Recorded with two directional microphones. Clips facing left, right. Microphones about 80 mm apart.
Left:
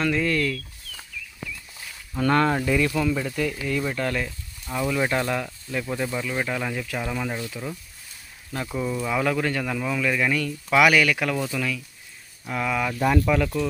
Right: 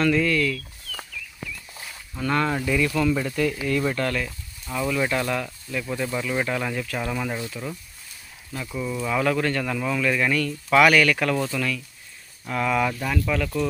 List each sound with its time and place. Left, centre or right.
0.0 s speech: centre
0.3 s speech: left
2.1 s speech: left
2.5 s speech: left
3.1 s speech: centre
3.9 s speech: centre
6.1 s speech: centre
8.6 s speech: left
8.9 s speech: centre